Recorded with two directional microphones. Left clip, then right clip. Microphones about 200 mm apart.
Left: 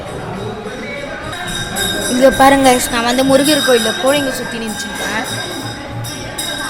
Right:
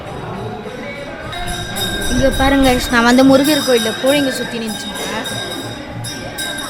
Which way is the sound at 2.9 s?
30° right (ahead or behind).